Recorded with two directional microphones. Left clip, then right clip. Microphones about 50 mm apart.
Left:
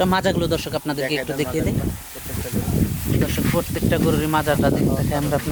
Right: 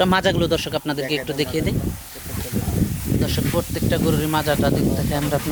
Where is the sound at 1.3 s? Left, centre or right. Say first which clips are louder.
Even; centre.